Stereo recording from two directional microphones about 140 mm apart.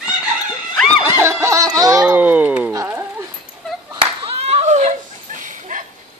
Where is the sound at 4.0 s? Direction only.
50° right (ahead or behind).